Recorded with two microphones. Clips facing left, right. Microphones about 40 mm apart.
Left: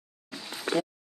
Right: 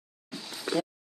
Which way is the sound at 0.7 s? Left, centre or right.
Left.